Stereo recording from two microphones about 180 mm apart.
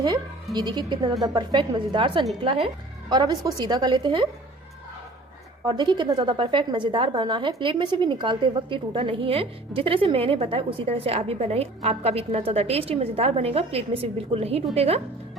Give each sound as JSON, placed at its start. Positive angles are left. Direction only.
{"t": 0.5, "sound": "a woman's voice", "side_deg": -25}
{"t": 5.6, "sound": "a woman's voice", "side_deg": -25}